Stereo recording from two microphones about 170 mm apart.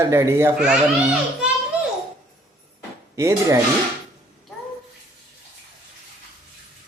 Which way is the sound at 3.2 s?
15° right (ahead or behind).